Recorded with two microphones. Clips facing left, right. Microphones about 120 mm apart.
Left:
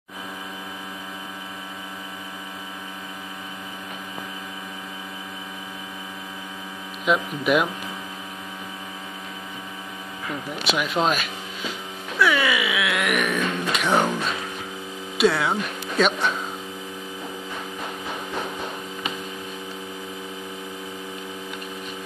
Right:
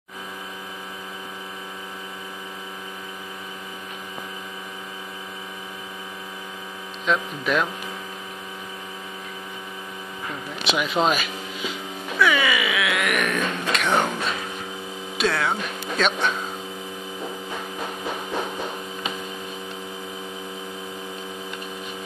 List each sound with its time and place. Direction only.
7.1 s speech: 10° left (ahead or behind)
10.6 s speech: centre (ahead or behind)
12.2 s music: centre (ahead or behind)
15.1 s speech: 5° left (ahead or behind)